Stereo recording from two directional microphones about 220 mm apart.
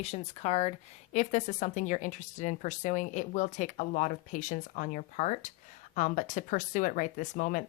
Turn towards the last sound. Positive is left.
turn(degrees=35)  # may be behind; listen again after turning